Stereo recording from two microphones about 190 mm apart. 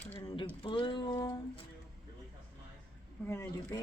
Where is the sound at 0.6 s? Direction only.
25° left (ahead or behind).